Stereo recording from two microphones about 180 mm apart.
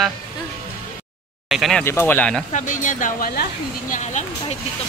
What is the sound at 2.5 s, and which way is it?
Speech, 45° left (ahead or behind).